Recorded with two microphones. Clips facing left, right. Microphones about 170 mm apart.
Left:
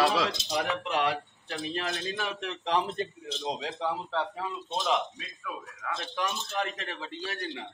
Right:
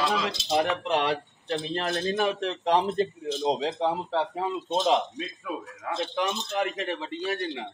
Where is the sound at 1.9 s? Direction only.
40° right (ahead or behind).